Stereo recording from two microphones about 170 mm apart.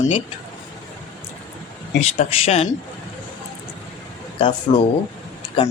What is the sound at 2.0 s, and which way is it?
Speech, 40° left (ahead or behind).